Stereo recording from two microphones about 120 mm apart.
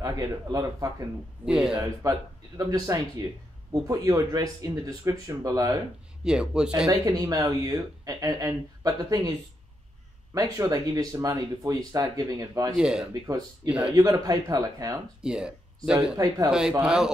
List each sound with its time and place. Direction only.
0.0 s speech: 30° right (ahead or behind)
1.4 s a man's voice: 5° right (ahead or behind)
1.8 s speech: 30° right (ahead or behind)
6.2 s a man's voice: 5° right (ahead or behind)
6.9 s speech: 30° right (ahead or behind)
10.3 s speech: 30° right (ahead or behind)
12.7 s a man's voice: 5° right (ahead or behind)
13.9 s speech: 30° right (ahead or behind)
15.2 s speech: 5° right (ahead or behind)